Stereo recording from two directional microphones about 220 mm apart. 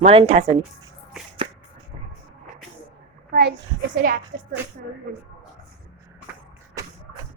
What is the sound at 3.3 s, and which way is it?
Speech, 50° right (ahead or behind).